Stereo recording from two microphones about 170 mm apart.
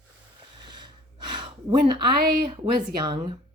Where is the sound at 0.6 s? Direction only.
25° right (ahead or behind).